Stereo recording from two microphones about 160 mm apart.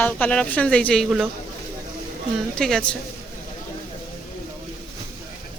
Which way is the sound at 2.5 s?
5° left (ahead or behind).